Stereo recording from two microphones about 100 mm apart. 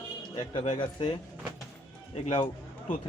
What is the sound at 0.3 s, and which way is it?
Speech, 65° left (ahead or behind).